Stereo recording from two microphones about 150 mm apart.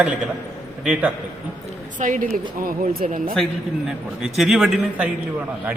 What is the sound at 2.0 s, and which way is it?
Speech, 60° right (ahead or behind).